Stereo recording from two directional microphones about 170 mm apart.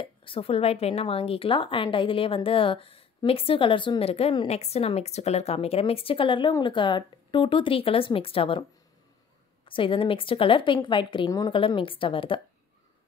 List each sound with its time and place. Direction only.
0.0 s a woman's voice: 30° left (ahead or behind)
9.7 s a woman's voice: 30° left (ahead or behind)